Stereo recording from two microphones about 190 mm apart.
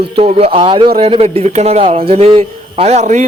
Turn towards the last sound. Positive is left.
turn(degrees=-35)  # may be behind; listen again after turning